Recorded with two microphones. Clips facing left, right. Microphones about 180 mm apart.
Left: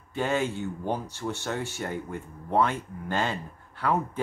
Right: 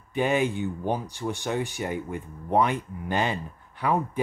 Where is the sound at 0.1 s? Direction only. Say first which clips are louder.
Right 3 dB; 15° right (ahead or behind).